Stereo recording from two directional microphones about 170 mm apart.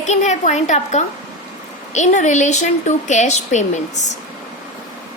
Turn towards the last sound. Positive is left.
turn(degrees=45)  # may be behind; listen again after turning